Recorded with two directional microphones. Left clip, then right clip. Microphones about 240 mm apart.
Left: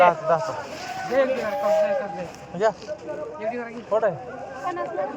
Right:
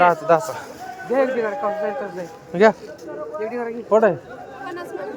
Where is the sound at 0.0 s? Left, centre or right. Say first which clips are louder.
Right 2 dB; right.